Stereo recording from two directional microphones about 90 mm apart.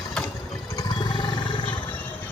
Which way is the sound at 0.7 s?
50° left (ahead or behind).